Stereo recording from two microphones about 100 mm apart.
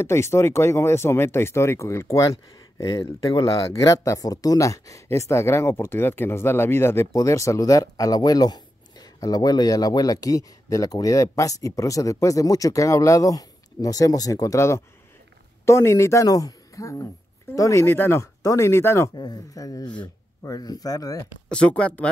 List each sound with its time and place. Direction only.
0.0 s speech: 25° left (ahead or behind)
19.1 s speech: 40° left (ahead or behind)
21.5 s speech: 10° left (ahead or behind)